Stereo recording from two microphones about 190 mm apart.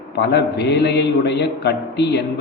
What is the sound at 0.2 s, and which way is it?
A man's voice, 60° left (ahead or behind).